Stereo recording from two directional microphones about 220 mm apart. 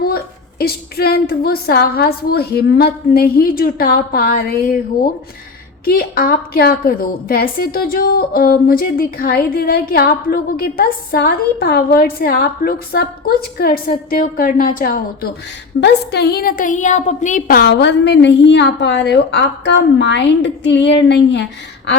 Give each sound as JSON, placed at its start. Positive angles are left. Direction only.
{"t": 0.6, "sound": "a woman's voice", "side_deg": 45}
{"t": 5.8, "sound": "a woman's voice", "side_deg": 40}